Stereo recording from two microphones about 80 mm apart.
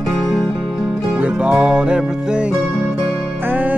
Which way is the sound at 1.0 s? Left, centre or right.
Centre.